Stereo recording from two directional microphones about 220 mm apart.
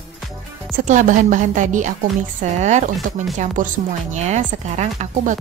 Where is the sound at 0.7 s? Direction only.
35° right (ahead or behind).